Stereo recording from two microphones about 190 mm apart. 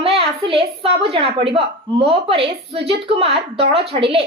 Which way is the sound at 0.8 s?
30° right (ahead or behind).